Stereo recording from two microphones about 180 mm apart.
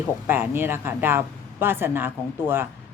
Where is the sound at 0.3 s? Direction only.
10° right (ahead or behind).